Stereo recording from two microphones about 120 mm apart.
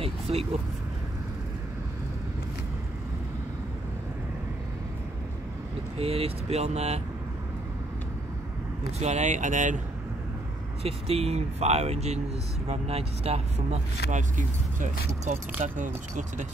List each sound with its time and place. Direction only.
0.0 s vehicle: 55° right (ahead or behind)
5.9 s speech: 60° right (ahead or behind)
9.0 s speech: 70° right (ahead or behind); by 9.8 s 90° right
10.8 s speech: 55° right (ahead or behind); by 16.4 s 90° right